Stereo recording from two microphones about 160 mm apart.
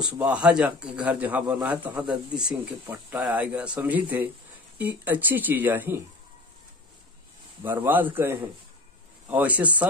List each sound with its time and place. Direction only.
0.0 s a man's voice: 5° right (ahead or behind)
7.6 s a man's voice: 10° right (ahead or behind)